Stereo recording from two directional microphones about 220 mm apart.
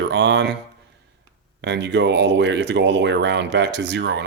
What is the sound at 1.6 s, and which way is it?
Speech, 50° right (ahead or behind).